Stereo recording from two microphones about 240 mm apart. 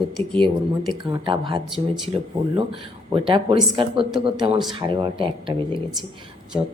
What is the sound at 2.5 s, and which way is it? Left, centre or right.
Speech, right.